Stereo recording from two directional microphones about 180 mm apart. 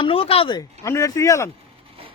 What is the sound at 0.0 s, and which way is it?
Speech, 30° left (ahead or behind).